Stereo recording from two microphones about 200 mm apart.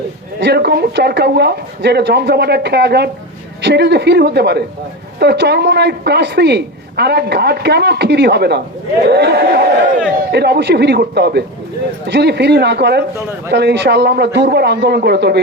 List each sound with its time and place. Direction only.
0.3 s speech: 60° right (ahead or behind)